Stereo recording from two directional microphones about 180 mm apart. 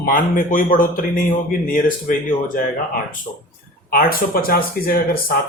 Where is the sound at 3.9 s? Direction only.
55° left (ahead or behind).